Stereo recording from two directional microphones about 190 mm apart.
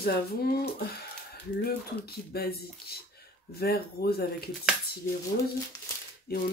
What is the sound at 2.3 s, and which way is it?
Speech, 55° left (ahead or behind).